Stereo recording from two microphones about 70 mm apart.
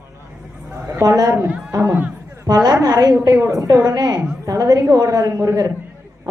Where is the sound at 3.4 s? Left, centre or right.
Right.